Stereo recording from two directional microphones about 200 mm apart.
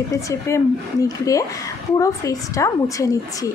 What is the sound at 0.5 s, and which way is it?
A woman's voice, 15° left (ahead or behind).